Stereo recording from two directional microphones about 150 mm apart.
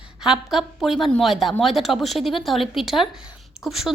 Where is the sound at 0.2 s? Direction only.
5° right (ahead or behind).